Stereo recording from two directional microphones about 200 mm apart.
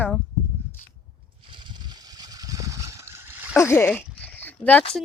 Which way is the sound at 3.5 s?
10° left (ahead or behind).